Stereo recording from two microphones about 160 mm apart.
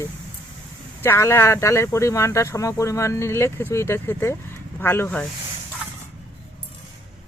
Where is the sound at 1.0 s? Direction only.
15° left (ahead or behind).